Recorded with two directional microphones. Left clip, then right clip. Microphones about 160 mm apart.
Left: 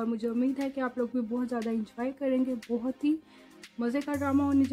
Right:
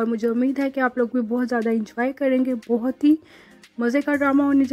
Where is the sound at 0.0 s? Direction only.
30° right (ahead or behind).